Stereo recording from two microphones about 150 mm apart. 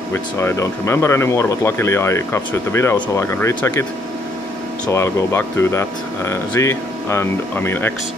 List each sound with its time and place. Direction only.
0.1 s speech: 20° left (ahead or behind)
4.8 s speech: 15° left (ahead or behind)